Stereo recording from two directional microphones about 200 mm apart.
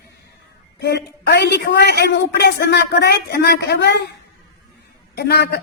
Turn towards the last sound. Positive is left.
turn(degrees=55)  # may be behind; listen again after turning